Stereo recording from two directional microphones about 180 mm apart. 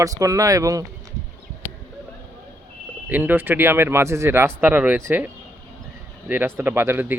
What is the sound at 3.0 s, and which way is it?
Speech, 10° right (ahead or behind).